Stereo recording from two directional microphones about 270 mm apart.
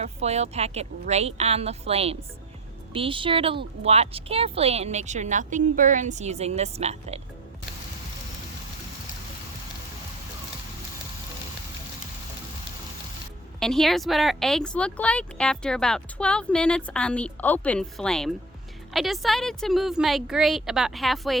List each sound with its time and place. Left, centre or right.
0.0 s a woman's voice: right
13.6 s speech: centre